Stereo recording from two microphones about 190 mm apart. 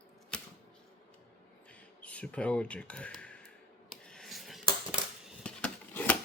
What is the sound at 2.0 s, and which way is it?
Speech, 5° left (ahead or behind).